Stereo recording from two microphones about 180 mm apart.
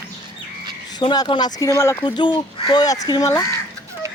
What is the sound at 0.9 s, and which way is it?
Speech, 25° left (ahead or behind).